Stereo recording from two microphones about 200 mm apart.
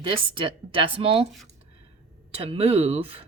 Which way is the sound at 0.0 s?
25° right (ahead or behind).